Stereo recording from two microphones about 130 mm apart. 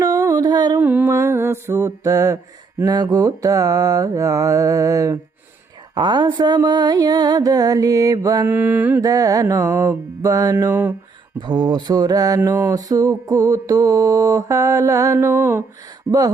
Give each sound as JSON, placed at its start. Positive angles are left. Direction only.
{"t": 0.0, "sound": "music", "side_deg": -25}
{"t": 0.8, "sound": "music", "side_deg": -15}
{"t": 1.1, "sound": "mantra", "side_deg": -20}
{"t": 5.9, "sound": "mantra", "side_deg": -35}
{"t": 8.4, "sound": "mantra", "side_deg": -15}
{"t": 9.0, "sound": "mantra", "side_deg": -25}
{"t": 10.7, "sound": "mantra", "side_deg": -15}
{"t": 11.3, "sound": "mantra", "side_deg": -35}